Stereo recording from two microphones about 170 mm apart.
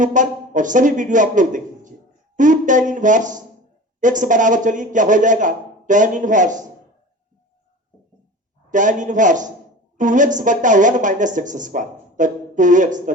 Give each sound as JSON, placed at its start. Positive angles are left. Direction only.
{"t": 0.0, "sound": "a woman's voice", "side_deg": -50}
{"t": 8.7, "sound": "a woman's voice", "side_deg": -50}